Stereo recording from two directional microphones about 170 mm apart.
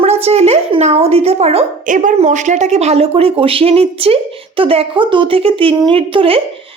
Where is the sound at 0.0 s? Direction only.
40° right (ahead or behind).